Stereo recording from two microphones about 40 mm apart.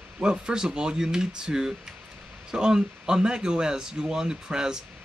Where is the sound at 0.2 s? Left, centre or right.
Centre.